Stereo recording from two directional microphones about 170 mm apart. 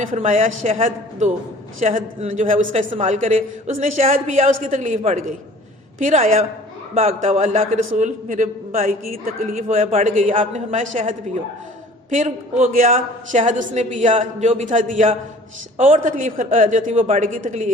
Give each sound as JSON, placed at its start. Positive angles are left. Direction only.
{"t": 0.0, "sound": "a woman's voice", "side_deg": -45}
{"t": 9.0, "sound": "a woman's voice", "side_deg": -55}
{"t": 12.1, "sound": "a woman's voice", "side_deg": -45}